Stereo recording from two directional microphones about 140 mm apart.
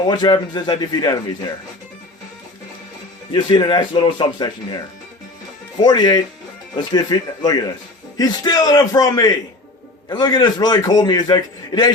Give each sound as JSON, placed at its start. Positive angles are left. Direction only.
{"t": 0.0, "sound": "a man's voice", "side_deg": 30}
{"t": 3.3, "sound": "speech", "side_deg": 30}
{"t": 5.8, "sound": "a man's voice", "side_deg": 30}